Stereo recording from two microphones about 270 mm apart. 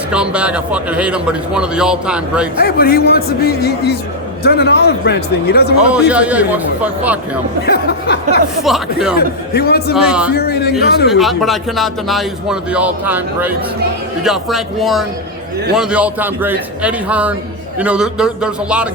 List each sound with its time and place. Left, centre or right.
0.1 s speech: centre
2.6 s a man's voice: left
6.1 s speech: centre
7.6 s a man's voice: left
8.6 s speech: centre
9.1 s a man's voice: left
9.9 s speech: centre
10.3 s a man's voice: left
11.2 s speech: centre